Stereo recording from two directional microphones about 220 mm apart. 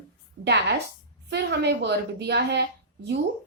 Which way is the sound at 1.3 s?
50° right (ahead or behind).